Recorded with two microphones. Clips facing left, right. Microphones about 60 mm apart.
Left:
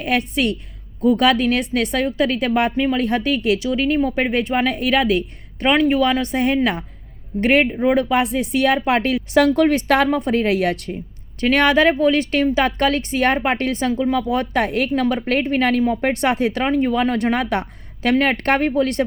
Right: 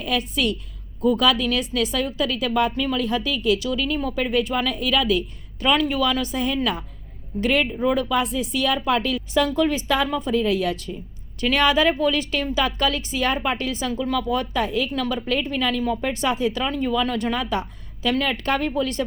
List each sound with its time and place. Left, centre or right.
0.0 s a woman's voice: left
2.7 s speech: left
3.1 s a woman's voice: left
8.1 s a woman's voice: left
13.9 s speech: left
14.3 s a woman's voice: left